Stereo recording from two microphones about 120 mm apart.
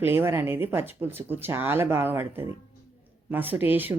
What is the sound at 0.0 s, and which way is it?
Speech, 20° right (ahead or behind).